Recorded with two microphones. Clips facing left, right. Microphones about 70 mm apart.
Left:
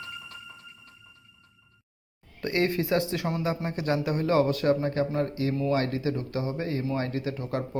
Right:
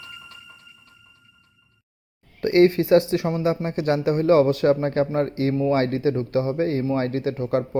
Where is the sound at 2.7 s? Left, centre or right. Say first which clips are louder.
Right 9 dB; right.